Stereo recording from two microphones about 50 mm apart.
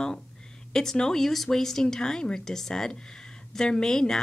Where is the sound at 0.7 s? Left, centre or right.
Centre.